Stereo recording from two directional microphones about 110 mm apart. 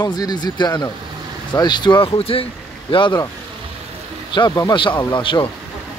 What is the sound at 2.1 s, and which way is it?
Speech, 60° left (ahead or behind).